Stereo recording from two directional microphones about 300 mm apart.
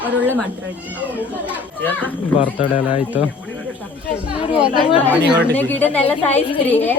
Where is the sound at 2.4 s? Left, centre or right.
Centre.